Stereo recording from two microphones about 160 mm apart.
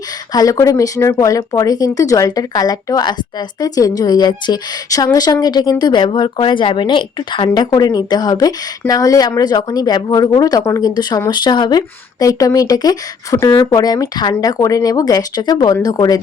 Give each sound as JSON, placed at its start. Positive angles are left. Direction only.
{"t": 0.3, "sound": "speech", "side_deg": 20}